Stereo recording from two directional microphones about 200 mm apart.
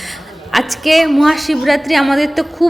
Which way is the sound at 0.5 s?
Centre (ahead or behind).